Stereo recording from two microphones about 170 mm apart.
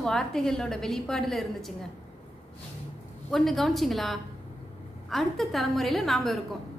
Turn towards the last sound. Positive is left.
turn(degrees=0)  # may be behind; listen again after turning